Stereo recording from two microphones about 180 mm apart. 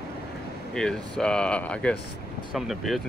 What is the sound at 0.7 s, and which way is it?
Speech, 5° left (ahead or behind).